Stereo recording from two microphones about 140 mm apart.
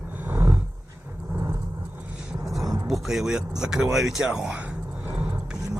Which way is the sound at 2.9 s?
Centre (ahead or behind).